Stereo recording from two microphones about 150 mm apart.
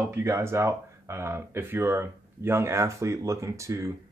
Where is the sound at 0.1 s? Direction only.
20° right (ahead or behind).